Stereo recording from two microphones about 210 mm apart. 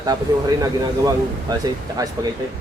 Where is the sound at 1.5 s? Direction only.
20° right (ahead or behind).